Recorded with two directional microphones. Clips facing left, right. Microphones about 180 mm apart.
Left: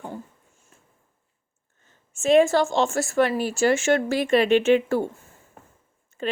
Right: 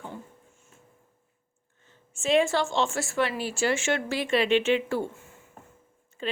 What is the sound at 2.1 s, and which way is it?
Speech, 45° left (ahead or behind).